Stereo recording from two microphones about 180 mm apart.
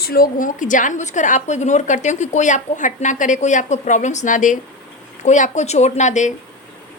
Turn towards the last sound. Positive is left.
turn(degrees=40)  # may be behind; listen again after turning